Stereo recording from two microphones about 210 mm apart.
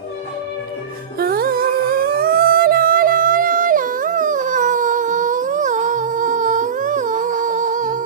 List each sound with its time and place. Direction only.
1.2 s humming: 45° right (ahead or behind)